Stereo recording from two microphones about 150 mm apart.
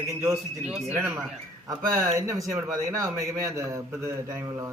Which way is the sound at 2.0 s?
20° right (ahead or behind).